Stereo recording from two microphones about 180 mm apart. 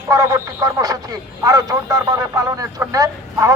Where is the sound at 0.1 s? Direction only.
20° right (ahead or behind).